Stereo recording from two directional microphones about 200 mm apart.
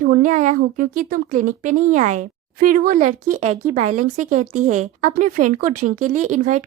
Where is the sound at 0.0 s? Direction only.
40° right (ahead or behind).